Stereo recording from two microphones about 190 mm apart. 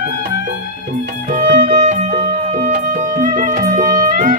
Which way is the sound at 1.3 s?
40° right (ahead or behind).